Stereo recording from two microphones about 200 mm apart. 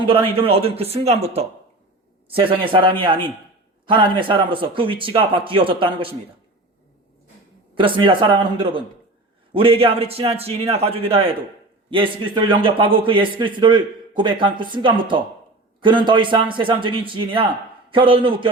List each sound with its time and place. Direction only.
0.0 s a man's voice: 25° right (ahead or behind)
7.8 s a man's voice: 25° right (ahead or behind)